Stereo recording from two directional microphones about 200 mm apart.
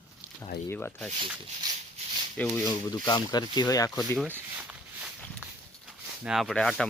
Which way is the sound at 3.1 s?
20° left (ahead or behind).